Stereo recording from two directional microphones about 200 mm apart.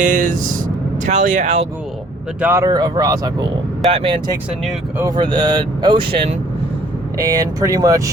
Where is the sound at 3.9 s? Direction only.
30° right (ahead or behind).